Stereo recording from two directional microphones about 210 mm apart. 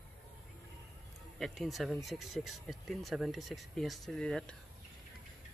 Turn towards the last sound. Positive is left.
turn(degrees=5)  # may be behind; listen again after turning